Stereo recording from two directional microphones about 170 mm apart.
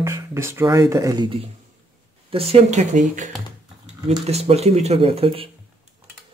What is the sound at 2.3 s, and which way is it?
Speech, 35° right (ahead or behind).